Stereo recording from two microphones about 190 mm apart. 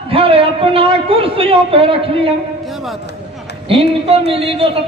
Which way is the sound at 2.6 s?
Centre (ahead or behind).